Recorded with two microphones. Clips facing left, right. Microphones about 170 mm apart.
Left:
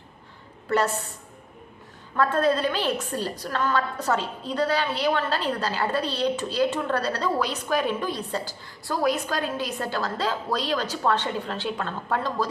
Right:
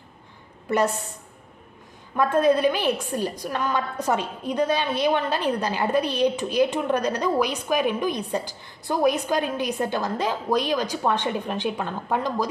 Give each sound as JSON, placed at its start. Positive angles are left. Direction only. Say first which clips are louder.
{"t": 0.7, "sound": "a woman's voice", "louder": "right 1 dB", "side_deg": -15}
{"t": 2.1, "sound": "a woman's voice", "louder": "right 3 dB", "side_deg": -15}